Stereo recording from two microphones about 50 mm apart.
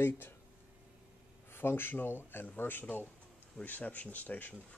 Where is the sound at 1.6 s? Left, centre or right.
Left.